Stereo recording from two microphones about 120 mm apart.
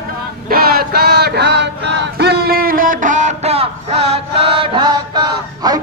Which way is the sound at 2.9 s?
90° right.